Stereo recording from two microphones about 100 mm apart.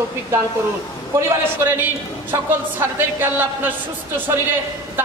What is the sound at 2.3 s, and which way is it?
A woman's voice, 20° right (ahead or behind).